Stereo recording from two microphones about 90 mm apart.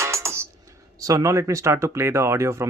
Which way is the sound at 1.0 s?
40° right (ahead or behind).